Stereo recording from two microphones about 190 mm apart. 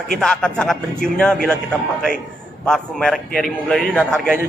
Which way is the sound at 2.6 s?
5° left (ahead or behind).